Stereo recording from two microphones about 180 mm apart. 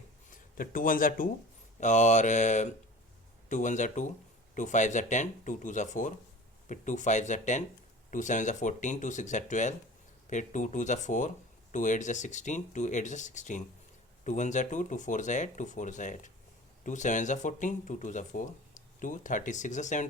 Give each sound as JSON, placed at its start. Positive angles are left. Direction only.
{"t": 0.3, "sound": "speech", "side_deg": 50}
{"t": 1.8, "sound": "mantra", "side_deg": 40}
{"t": 3.5, "sound": "speech", "side_deg": 45}